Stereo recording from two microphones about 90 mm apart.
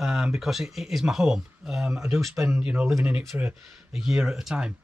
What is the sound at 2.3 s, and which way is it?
Speech, 25° right (ahead or behind).